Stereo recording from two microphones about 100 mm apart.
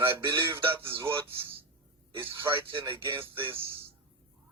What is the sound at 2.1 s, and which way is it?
Synthetic singing, 25° right (ahead or behind).